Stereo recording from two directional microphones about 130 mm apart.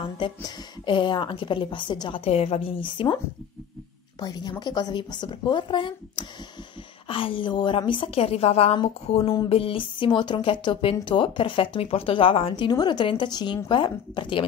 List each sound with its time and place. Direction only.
0.4 s speech: 40° left (ahead or behind)
4.2 s a woman's voice: 35° left (ahead or behind)